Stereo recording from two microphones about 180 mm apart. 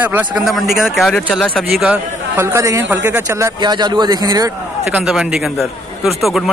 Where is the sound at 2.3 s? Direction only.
15° right (ahead or behind).